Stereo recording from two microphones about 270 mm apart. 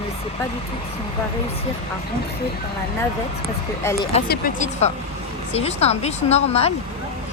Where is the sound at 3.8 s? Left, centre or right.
Centre.